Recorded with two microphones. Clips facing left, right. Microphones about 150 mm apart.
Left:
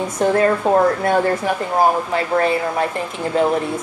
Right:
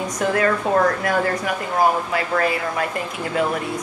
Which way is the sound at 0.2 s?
30° left (ahead or behind).